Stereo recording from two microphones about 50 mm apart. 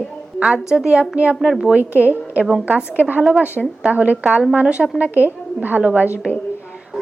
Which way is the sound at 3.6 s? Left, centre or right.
Centre.